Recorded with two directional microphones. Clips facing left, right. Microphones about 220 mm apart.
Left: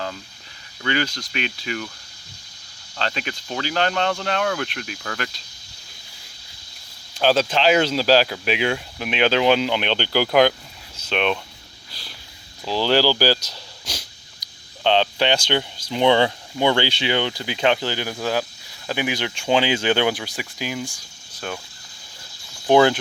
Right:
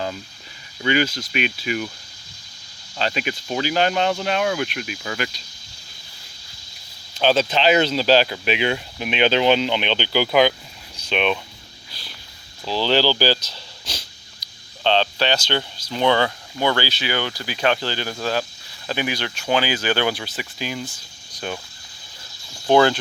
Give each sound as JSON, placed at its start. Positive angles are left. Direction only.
{"t": 0.8, "sound": "speech", "side_deg": -15}
{"t": 3.0, "sound": "speech", "side_deg": -10}
{"t": 7.2, "sound": "speech", "side_deg": 5}
{"t": 10.9, "sound": "a sound", "side_deg": 0}
{"t": 12.6, "sound": "speech", "side_deg": 10}
{"t": 22.6, "sound": "speech", "side_deg": 15}